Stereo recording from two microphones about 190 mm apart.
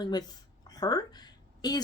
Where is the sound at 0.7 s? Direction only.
20° left (ahead or behind).